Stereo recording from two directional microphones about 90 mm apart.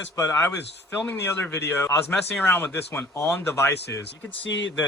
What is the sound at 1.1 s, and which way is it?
Speech, 20° left (ahead or behind).